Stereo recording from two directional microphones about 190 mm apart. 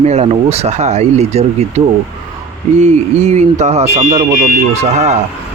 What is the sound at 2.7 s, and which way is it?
Speech, 35° right (ahead or behind).